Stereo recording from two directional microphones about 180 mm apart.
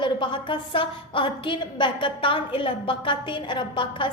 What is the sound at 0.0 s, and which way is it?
A woman's voice, 25° left (ahead or behind).